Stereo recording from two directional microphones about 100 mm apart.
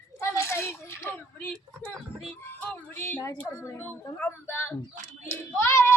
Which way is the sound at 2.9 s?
20° left (ahead or behind).